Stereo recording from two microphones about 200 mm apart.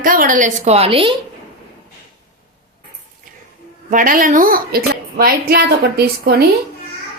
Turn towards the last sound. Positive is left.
turn(degrees=-50)  # may be behind; listen again after turning